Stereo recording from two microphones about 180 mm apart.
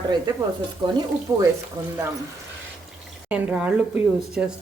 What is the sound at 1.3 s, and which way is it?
Speech, 15° right (ahead or behind).